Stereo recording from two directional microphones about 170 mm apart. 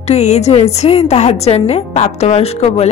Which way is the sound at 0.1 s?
40° left (ahead or behind).